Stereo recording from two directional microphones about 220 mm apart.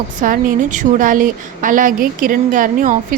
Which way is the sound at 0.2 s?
35° right (ahead or behind).